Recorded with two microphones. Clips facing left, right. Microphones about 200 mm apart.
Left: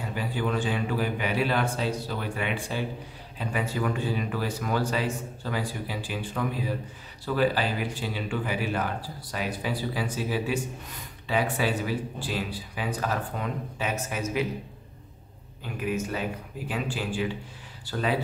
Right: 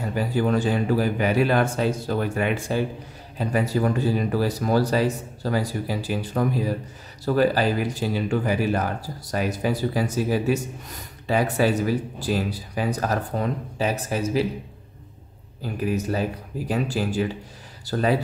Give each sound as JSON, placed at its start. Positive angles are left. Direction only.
{"t": 0.1, "sound": "speech", "side_deg": -40}
{"t": 15.6, "sound": "speech", "side_deg": -35}